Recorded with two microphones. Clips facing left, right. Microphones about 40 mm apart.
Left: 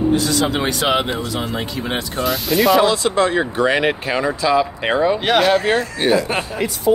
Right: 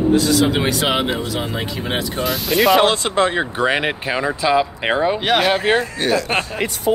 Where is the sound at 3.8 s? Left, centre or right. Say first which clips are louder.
Left 2 dB; centre.